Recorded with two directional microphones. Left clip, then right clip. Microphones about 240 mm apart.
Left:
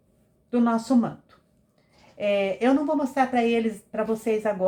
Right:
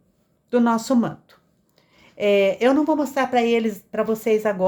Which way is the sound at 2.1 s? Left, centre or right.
Right.